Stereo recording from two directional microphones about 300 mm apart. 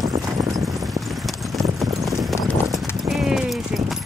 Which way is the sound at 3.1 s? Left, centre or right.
Centre.